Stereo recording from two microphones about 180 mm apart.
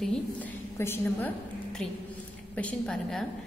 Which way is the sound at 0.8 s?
10° left (ahead or behind).